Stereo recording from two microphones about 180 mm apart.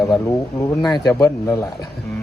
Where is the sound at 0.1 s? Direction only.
15° left (ahead or behind).